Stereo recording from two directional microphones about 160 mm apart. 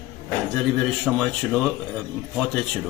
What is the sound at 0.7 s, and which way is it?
Speech, centre (ahead or behind).